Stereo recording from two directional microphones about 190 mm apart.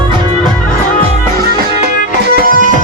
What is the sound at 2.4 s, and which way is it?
Music, 45° right (ahead or behind).